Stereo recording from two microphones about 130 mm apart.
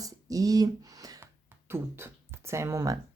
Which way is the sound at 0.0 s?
25° right (ahead or behind).